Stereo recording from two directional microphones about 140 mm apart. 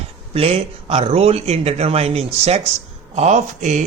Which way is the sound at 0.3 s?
45° right (ahead or behind).